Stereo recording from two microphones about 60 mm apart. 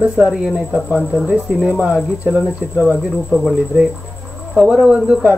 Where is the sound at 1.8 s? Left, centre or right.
Right.